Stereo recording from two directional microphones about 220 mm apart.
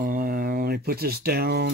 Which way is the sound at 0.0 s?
40° right (ahead or behind).